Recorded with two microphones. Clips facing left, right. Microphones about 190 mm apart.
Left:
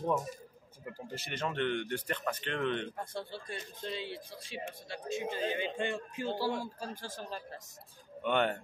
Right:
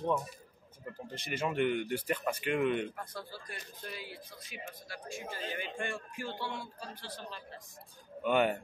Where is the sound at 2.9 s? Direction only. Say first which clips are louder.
Left 4 dB; 25° left (ahead or behind).